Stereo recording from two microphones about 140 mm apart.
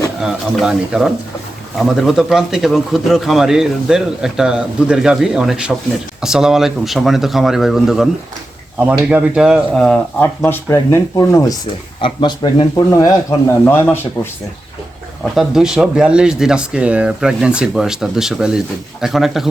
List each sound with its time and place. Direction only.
0.2 s speech: 5° right (ahead or behind); by 11.5 s 20° left (ahead or behind)
11.9 s speech: 35° left (ahead or behind)
12.9 s speech: 25° left (ahead or behind)
15.2 s speech: centre (ahead or behind)